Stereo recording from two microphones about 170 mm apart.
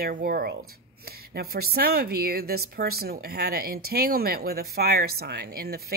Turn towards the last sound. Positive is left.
turn(degrees=-65)  # may be behind; listen again after turning